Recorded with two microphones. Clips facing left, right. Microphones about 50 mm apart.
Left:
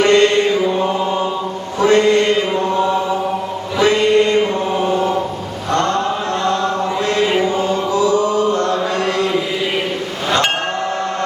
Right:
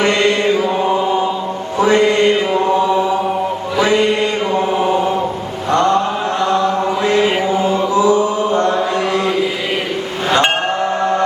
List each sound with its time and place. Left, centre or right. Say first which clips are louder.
0.0 s mantra: left 3 dB; centre
1.8 s mantra: even; right
3.8 s mantra: even; centre
5.7 s chant: right 4 dB; right
7.0 s chant: right 1 dB; right